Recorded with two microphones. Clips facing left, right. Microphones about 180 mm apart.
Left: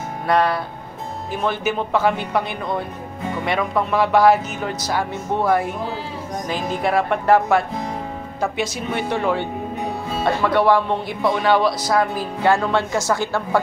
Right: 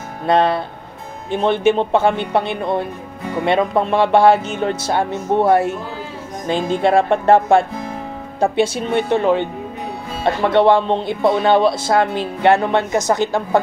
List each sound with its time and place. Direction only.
0.3 s speech: 25° right (ahead or behind)